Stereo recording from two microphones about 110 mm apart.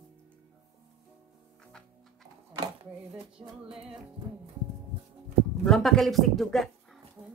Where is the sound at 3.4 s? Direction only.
45° right (ahead or behind).